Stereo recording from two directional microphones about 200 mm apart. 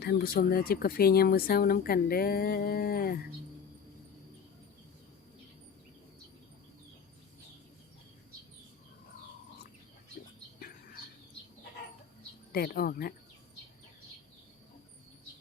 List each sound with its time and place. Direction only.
0.0 s speech: 50° left (ahead or behind)
12.5 s speech: 50° left (ahead or behind)